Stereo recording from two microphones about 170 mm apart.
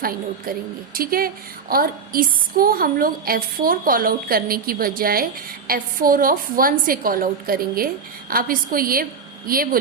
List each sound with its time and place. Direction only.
0.0 s a woman's voice: 60° right (ahead or behind)